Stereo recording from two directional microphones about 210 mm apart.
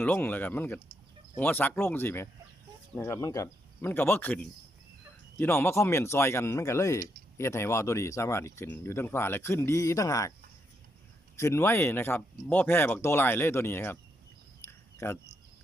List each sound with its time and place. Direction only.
0.0 s speech: 10° left (ahead or behind)
11.3 s speech: 10° left (ahead or behind)
14.6 s a sound: 10° left (ahead or behind)